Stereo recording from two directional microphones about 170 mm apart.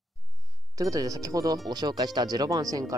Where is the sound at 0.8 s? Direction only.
20° right (ahead or behind).